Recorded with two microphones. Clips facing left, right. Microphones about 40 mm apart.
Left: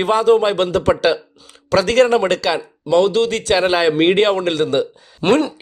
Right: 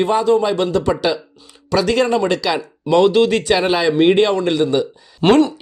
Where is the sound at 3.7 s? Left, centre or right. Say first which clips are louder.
Left 1 dB; left.